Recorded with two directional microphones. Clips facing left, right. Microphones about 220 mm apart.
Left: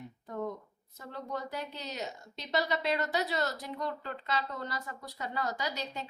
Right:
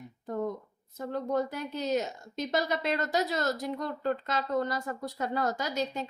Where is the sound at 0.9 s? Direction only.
50° right (ahead or behind).